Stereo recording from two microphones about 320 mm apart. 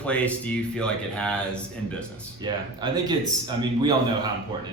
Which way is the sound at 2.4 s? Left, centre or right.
Centre.